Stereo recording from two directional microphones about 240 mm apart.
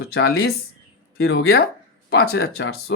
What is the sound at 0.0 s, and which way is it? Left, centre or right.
A woman's voice, left.